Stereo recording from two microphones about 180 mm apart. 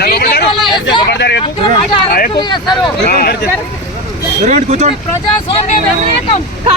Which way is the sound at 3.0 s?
55° left (ahead or behind).